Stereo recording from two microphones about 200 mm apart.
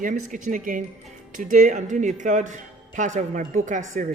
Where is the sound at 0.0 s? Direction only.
40° right (ahead or behind).